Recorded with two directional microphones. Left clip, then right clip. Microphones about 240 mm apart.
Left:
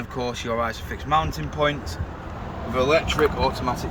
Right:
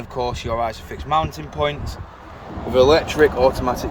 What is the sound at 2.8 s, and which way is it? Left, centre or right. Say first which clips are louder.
Speech: right 3 dB; centre.